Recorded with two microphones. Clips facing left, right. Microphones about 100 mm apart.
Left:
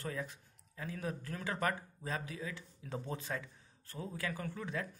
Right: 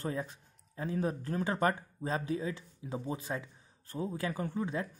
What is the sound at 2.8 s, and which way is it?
Speech, 15° right (ahead or behind).